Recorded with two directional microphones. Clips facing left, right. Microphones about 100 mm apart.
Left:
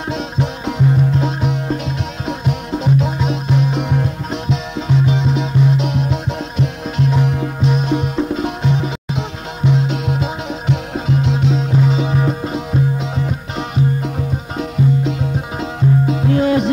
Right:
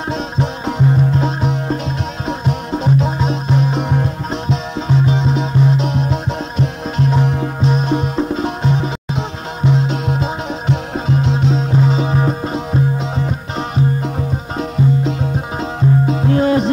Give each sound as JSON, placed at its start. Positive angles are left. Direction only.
{"t": 0.1, "sound": "music", "side_deg": -35}
{"t": 10.2, "sound": "music", "side_deg": -35}
{"t": 16.1, "sound": "music", "side_deg": -35}